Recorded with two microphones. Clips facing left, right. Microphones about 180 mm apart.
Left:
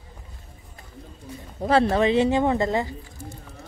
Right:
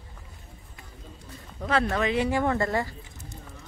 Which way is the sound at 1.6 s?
30° left (ahead or behind).